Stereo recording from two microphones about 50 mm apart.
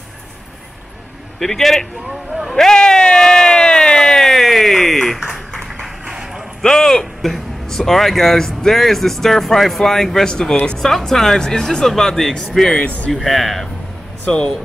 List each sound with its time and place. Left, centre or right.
1.4 s speech: centre
2.5 s a sound: centre
6.0 s bow-wow: centre
6.6 s speech: centre
10.8 s speech: centre
13.1 s speech: centre
14.2 s speech: left